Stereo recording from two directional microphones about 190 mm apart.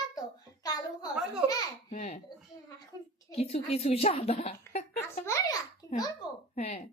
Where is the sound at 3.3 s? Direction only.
30° left (ahead or behind).